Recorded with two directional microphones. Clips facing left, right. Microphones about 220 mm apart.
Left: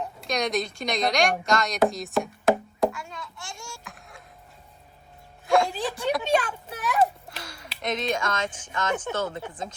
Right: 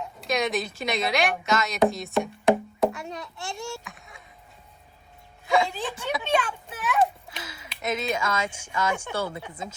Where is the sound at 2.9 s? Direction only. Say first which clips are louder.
Right 3 dB; 20° right (ahead or behind).